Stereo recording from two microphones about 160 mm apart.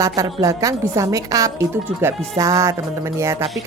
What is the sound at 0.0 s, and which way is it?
A woman's voice, 20° right (ahead or behind).